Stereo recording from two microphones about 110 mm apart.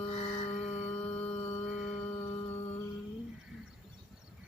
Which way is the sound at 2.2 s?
25° left (ahead or behind).